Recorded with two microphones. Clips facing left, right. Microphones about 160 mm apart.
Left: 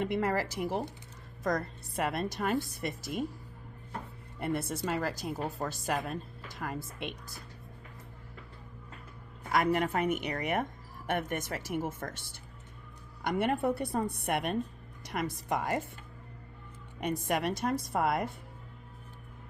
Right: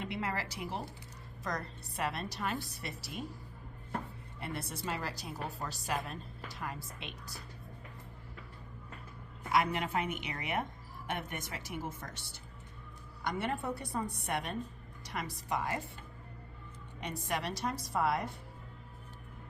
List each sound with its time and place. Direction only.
0.0 s speech: 50° left (ahead or behind)
2.0 s speech: 50° left (ahead or behind)
4.4 s speech: 50° left (ahead or behind)
9.5 s a woman's voice: 45° left (ahead or behind)
17.0 s speech: 50° left (ahead or behind)